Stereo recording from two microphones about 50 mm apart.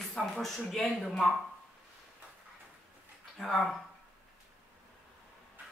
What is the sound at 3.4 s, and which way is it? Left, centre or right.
Speech, centre.